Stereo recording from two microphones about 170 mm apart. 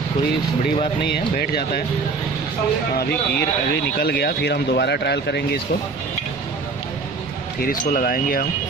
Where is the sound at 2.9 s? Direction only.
70° left (ahead or behind).